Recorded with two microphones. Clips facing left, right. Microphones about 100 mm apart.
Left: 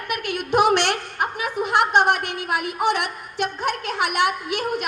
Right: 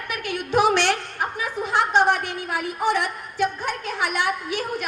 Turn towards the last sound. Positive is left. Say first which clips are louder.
# left 2 dB
turn(degrees=65)  # may be behind; listen again after turning